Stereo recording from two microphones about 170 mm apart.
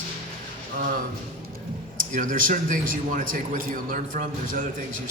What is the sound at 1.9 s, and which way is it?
A man's voice, 50° right (ahead or behind).